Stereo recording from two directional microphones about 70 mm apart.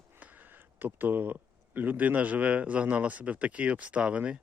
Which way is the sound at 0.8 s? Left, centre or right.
Right.